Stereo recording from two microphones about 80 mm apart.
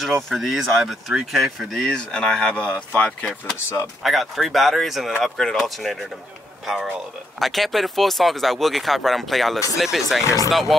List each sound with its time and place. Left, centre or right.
0.0 s speech: centre
4.0 s speech: centre